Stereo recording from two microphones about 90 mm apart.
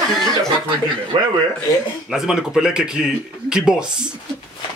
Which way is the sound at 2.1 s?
5° right (ahead or behind).